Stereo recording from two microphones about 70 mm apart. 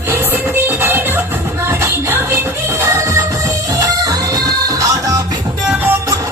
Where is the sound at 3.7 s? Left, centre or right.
Right.